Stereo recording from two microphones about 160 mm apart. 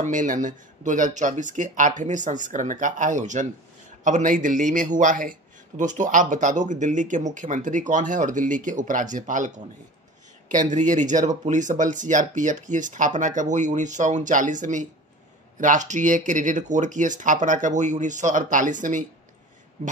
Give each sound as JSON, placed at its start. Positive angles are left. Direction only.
{"t": 0.0, "sound": "a man's voice", "side_deg": -55}
{"t": 10.5, "sound": "a man's voice", "side_deg": -50}